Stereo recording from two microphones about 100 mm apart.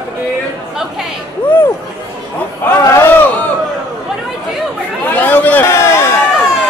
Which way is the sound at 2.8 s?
25° left (ahead or behind).